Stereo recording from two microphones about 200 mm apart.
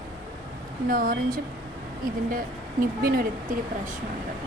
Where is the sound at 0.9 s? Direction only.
45° right (ahead or behind).